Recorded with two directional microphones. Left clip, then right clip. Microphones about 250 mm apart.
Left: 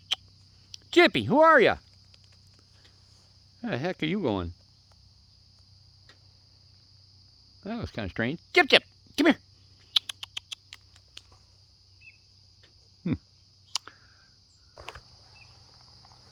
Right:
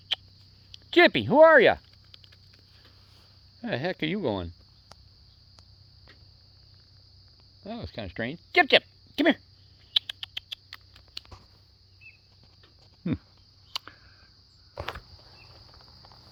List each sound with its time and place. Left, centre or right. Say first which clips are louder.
0.1 s a sound: even; left
0.7 s speech: right 1 dB; centre
3.6 s speech: right 1 dB; centre
7.6 s speech: left 2 dB; left
9.9 s rodents: even; left
11.2 s a sound: right 7 dB; right